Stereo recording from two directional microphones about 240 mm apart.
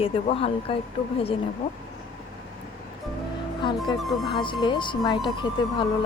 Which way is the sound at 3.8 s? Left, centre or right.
Centre.